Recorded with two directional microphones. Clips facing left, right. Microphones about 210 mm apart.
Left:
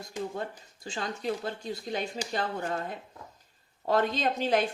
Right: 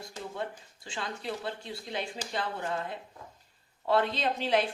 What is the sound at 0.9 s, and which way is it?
Speech, 40° left (ahead or behind).